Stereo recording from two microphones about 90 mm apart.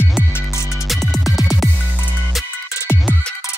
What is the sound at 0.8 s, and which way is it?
Music, centre (ahead or behind).